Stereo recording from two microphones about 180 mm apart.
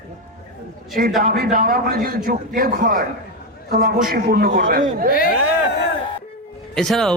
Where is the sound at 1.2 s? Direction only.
50° right (ahead or behind).